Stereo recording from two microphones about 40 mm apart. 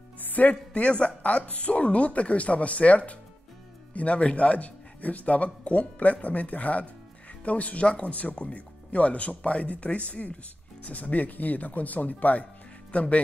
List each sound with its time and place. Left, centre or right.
0.2 s speech: left